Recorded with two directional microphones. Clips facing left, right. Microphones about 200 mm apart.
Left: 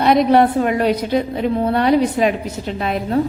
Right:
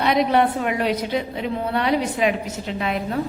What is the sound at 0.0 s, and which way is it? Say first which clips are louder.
A woman's voice: left 5 dB; 40° left (ahead or behind).